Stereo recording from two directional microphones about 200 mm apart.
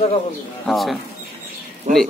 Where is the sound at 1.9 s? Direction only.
35° right (ahead or behind).